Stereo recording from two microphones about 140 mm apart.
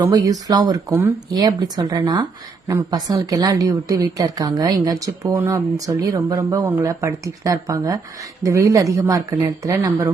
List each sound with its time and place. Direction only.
0.0 s a woman's voice: 25° right (ahead or behind)